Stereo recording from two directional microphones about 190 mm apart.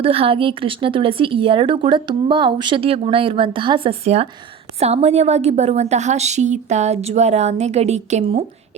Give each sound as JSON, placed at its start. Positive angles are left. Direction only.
{"t": 0.0, "sound": "a woman's voice", "side_deg": -30}